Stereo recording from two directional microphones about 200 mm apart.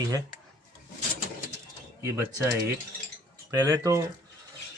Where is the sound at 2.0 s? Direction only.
15° right (ahead or behind).